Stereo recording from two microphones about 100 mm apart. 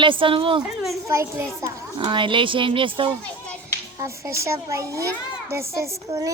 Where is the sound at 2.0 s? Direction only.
55° right (ahead or behind).